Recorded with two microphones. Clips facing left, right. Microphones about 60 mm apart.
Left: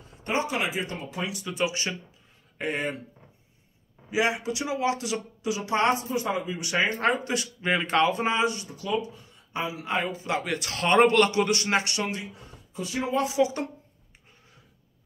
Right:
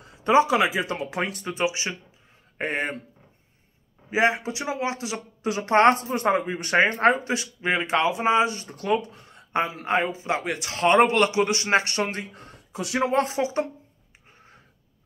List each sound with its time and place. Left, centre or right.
0.8 s speech: right
1.4 s a man's voice: right
2.5 s speech: right
4.1 s a man's voice: right
5.4 s speech: right; by 8.4 s centre
8.4 s a man's voice: right
8.6 s speech: right
9.8 s a man's voice: right
13.2 s speech: right